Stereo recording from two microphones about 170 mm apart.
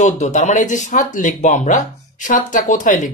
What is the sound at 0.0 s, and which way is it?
Speech, 45° left (ahead or behind).